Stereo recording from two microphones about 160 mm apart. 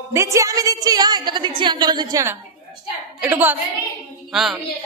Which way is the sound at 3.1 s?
10° right (ahead or behind).